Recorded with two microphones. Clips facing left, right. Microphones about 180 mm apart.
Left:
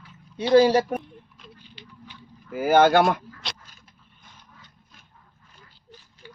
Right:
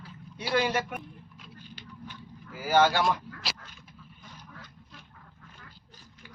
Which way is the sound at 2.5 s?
55° left (ahead or behind).